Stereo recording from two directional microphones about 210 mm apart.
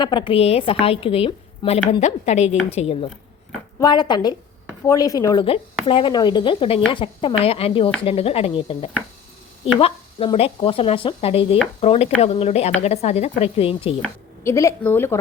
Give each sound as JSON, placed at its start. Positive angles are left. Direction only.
{"t": 0.0, "sound": "speech", "side_deg": 20}
{"t": 14.4, "sound": "a woman's voice", "side_deg": 15}